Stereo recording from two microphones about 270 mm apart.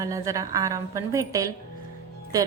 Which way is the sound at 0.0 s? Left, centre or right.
Centre.